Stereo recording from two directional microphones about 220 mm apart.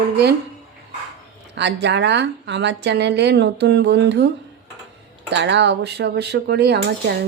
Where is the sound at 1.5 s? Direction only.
50° right (ahead or behind).